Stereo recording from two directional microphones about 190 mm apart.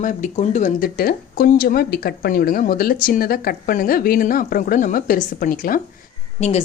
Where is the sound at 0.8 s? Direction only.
50° left (ahead or behind).